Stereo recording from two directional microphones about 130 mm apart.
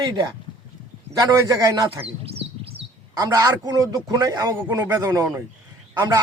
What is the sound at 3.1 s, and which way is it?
A man's voice, 25° right (ahead or behind).